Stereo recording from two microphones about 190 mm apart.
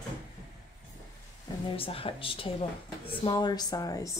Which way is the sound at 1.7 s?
30° left (ahead or behind).